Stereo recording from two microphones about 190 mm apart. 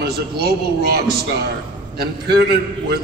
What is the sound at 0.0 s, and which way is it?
A man's voice, 55° right (ahead or behind).